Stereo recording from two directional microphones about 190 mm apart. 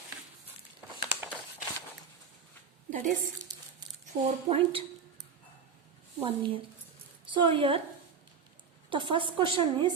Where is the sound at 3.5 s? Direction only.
20° right (ahead or behind).